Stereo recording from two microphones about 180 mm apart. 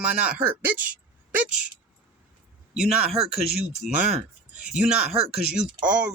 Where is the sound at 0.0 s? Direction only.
5° right (ahead or behind).